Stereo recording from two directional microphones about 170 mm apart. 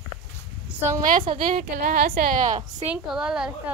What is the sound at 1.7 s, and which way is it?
Speech, 60° right (ahead or behind).